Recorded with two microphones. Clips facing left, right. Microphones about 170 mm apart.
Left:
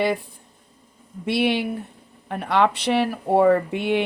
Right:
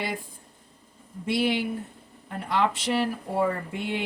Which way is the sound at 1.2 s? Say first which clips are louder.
Left 4 dB; 70° left (ahead or behind).